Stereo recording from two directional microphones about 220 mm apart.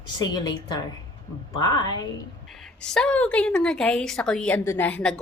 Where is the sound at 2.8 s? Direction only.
5° left (ahead or behind).